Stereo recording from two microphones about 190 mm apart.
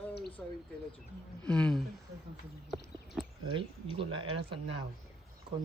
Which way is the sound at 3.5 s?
25° right (ahead or behind).